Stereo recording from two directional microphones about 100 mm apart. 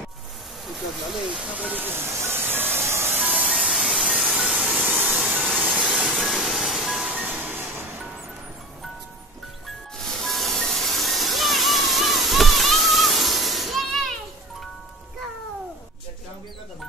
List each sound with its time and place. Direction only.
1.3 s speech: 10° right (ahead or behind); by 3.2 s 25° right (ahead or behind)
3.2 s music: 15° right (ahead or behind)
3.6 s steam: 5° right (ahead or behind)
4.6 s a sound: centre (ahead or behind)
5.9 s train: centre (ahead or behind)
7.2 s music: 15° right (ahead or behind)
10.1 s music: centre (ahead or behind)